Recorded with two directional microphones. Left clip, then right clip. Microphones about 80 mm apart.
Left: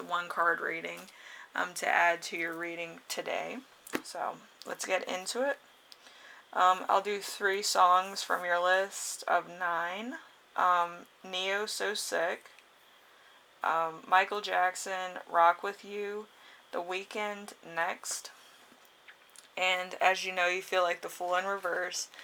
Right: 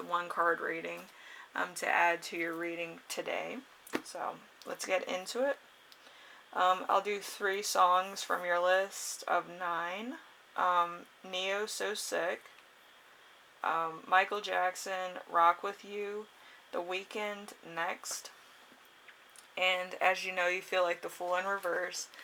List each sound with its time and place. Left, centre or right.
0.1 s speech: left
13.6 s speech: left
19.5 s speech: left